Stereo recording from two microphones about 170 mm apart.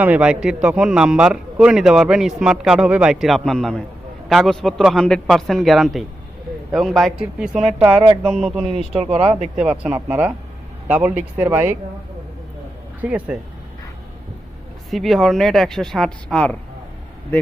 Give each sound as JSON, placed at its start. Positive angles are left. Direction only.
{"t": 0.0, "sound": "a man's voice", "side_deg": -10}
{"t": 9.0, "sound": "speech", "side_deg": -35}
{"t": 9.6, "sound": "speech", "side_deg": -5}
{"t": 13.0, "sound": "speech", "side_deg": -10}
{"t": 14.8, "sound": "a man's voice", "side_deg": 0}